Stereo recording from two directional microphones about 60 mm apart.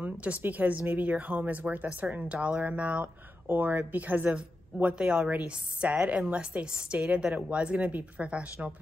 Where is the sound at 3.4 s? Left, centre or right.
Right.